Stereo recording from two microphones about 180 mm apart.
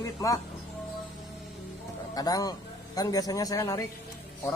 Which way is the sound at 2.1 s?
20° left (ahead or behind).